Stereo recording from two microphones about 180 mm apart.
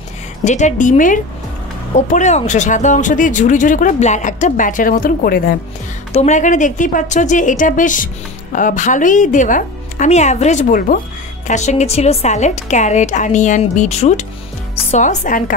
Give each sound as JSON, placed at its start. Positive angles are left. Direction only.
{"t": 0.4, "sound": "speech", "side_deg": 40}
{"t": 6.1, "sound": "a woman's voice", "side_deg": 40}